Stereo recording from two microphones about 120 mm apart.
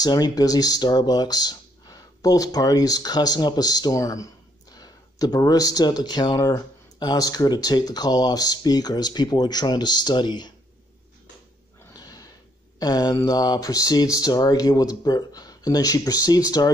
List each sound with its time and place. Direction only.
0.0 s speech: 35° left (ahead or behind)
11.9 s a sound: 30° left (ahead or behind)
12.7 s speech: 35° left (ahead or behind)